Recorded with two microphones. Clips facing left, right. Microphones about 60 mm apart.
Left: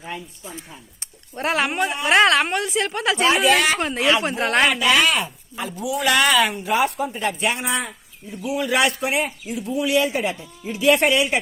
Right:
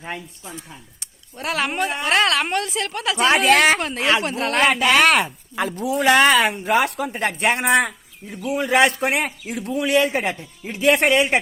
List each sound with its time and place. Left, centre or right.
0.9 s a sound: left
2.0 s a woman's voice: left
2.4 s a woman's voice: centre
3.2 s a man's voice: right
3.8 s a woman's voice: centre
4.7 s a man's voice: right
5.8 s speech: right
6.6 s a man's voice: right
6.8 s speech: right
7.2 s a man's voice: right
7.6 s speech: right
8.5 s a man's voice: right
9.7 s speech: right